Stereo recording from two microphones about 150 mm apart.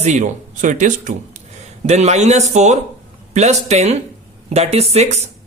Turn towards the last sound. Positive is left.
turn(degrees=-45)  # may be behind; listen again after turning